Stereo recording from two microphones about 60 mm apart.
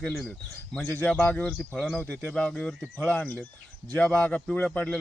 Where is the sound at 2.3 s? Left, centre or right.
Centre.